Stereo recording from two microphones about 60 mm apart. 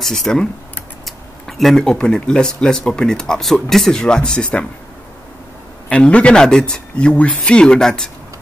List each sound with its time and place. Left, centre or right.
0.0 s speech: centre
1.6 s speech: centre
5.9 s speech: centre